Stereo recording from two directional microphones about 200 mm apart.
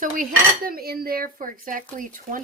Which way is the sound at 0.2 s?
45° right (ahead or behind).